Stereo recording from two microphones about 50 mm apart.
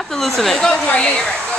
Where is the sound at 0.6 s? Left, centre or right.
Left.